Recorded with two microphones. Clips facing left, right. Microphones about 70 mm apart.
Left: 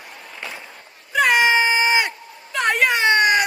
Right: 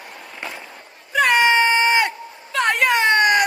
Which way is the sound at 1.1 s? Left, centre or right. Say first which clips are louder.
Right 1 dB; centre.